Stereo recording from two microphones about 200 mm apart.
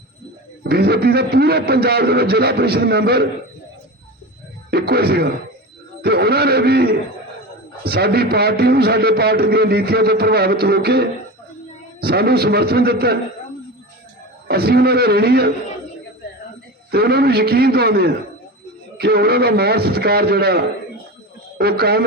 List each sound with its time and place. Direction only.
0.6 s a man's voice: 50° right (ahead or behind)
4.7 s a man's voice: 50° right (ahead or behind)
14.4 s a man's voice: 55° right (ahead or behind)
16.9 s a man's voice: 50° right (ahead or behind)